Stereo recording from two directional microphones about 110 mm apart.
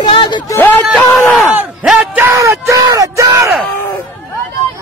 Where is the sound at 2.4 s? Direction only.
30° right (ahead or behind).